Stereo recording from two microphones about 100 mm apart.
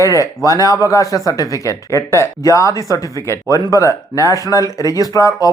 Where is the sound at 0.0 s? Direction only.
30° left (ahead or behind).